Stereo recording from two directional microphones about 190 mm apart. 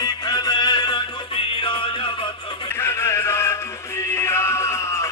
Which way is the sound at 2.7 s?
10° left (ahead or behind).